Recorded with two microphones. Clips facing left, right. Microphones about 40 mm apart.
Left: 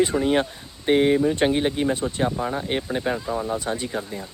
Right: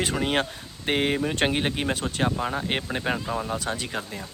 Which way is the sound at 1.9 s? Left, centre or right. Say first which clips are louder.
Left 2 dB; right.